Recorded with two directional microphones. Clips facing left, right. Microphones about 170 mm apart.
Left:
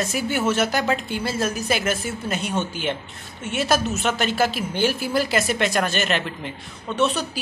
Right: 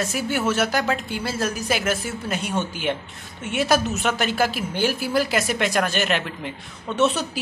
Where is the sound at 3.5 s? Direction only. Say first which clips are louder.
Right 1 dB; 15° right (ahead or behind).